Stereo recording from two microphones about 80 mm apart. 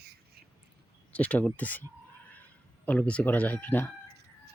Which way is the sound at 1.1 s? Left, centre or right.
Centre.